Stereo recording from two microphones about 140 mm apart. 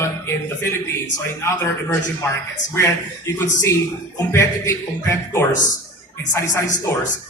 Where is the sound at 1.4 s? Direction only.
20° left (ahead or behind).